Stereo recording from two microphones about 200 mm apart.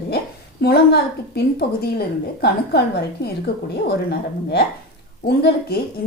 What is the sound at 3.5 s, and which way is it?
A woman's voice, 55° left (ahead or behind).